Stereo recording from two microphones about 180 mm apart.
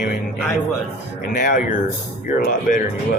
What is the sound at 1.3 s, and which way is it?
Speech, 50° left (ahead or behind).